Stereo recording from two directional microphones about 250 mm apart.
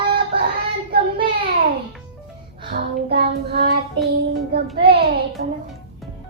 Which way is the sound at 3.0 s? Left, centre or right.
Right.